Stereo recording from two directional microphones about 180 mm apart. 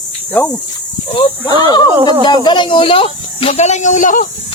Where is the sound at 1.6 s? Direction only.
25° left (ahead or behind); by 4.3 s 45° left (ahead or behind).